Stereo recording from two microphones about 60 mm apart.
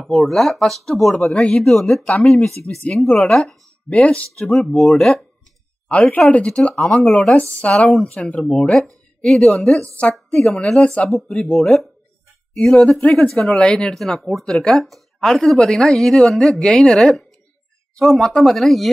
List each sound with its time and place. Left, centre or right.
0.1 s speech: centre
4.0 s speech: centre
4.5 s speech: centre
5.9 s speech: left
7.3 s a woman's voice: left; by 11.9 s centre
12.5 s speech: centre